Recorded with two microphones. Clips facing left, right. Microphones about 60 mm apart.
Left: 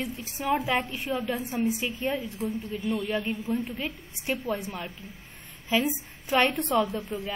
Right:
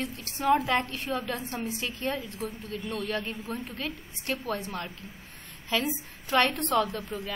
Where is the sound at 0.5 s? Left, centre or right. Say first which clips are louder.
Right 2 dB; left.